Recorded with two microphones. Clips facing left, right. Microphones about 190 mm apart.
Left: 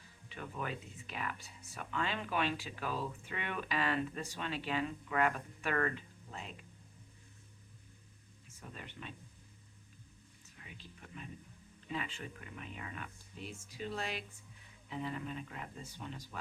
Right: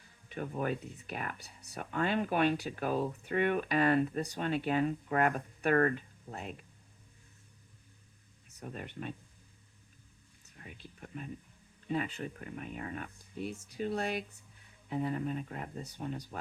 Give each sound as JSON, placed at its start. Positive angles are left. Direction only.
{"t": 0.3, "sound": "speech", "side_deg": -45}
{"t": 8.6, "sound": "speech", "side_deg": -50}
{"t": 10.6, "sound": "speech", "side_deg": -45}